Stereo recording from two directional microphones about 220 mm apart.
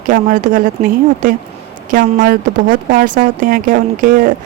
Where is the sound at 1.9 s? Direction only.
40° right (ahead or behind).